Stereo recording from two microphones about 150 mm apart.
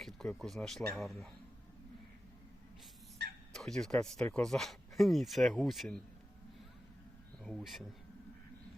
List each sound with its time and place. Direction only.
0.0 s speech: centre (ahead or behind)
3.5 s speech: 5° left (ahead or behind)
7.4 s speech: centre (ahead or behind)